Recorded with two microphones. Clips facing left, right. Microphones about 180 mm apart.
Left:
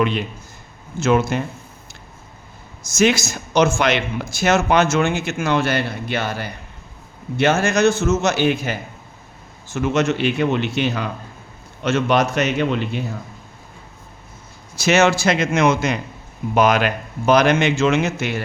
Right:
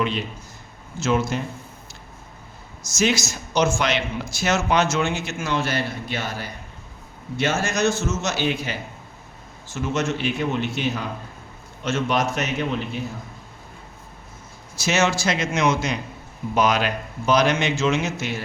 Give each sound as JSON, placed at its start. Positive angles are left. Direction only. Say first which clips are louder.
{"t": 0.9, "sound": "speech", "louder": "left 5 dB", "side_deg": 55}
{"t": 2.8, "sound": "speech", "louder": "left 5 dB", "side_deg": 55}
{"t": 9.7, "sound": "a man's voice", "louder": "left 6 dB", "side_deg": 70}
{"t": 14.8, "sound": "speech", "louder": "left 6 dB", "side_deg": 65}